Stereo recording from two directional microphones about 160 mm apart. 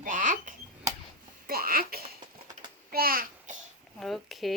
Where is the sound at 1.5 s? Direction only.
70° right (ahead or behind).